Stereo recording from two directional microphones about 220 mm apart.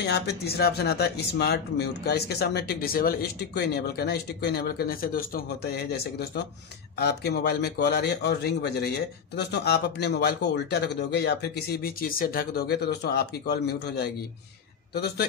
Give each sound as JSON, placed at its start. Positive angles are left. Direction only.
{"t": 0.0, "sound": "a man's voice", "side_deg": 50}